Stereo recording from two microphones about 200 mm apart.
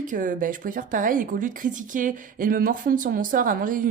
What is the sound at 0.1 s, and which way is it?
A woman's voice, 40° right (ahead or behind).